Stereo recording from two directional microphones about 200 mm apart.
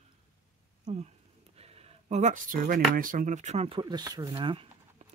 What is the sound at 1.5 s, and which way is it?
Speech, 30° right (ahead or behind).